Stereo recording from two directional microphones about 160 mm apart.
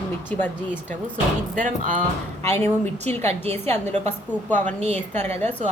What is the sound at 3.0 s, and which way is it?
A woman's voice, 40° right (ahead or behind).